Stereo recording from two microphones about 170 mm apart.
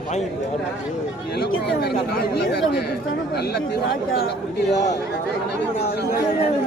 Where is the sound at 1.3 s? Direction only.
70° left (ahead or behind).